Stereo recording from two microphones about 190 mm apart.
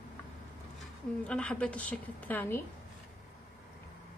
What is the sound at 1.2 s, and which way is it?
A woman's voice, 5° left (ahead or behind).